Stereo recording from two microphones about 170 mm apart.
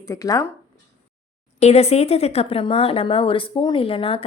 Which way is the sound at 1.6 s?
40° left (ahead or behind).